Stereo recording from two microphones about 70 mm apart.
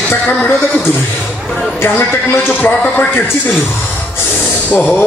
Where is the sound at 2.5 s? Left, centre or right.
Left.